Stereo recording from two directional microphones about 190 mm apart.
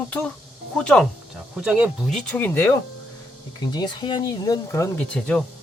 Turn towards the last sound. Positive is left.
turn(degrees=5)  # may be behind; listen again after turning